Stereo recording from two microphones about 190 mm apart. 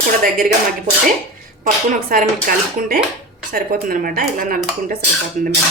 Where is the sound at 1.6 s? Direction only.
45° right (ahead or behind).